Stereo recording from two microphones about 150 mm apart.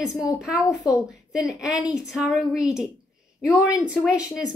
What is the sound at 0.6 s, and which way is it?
Speech, 20° left (ahead or behind).